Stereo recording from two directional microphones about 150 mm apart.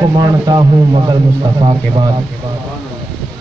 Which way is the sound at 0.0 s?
25° right (ahead or behind).